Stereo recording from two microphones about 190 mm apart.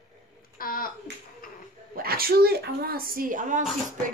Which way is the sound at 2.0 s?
50° right (ahead or behind).